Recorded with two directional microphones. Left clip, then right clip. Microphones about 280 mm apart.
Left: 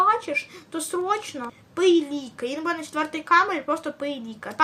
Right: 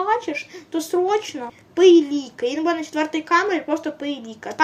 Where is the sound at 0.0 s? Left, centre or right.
Centre.